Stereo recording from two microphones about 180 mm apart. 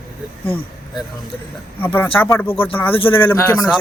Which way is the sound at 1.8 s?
10° left (ahead or behind).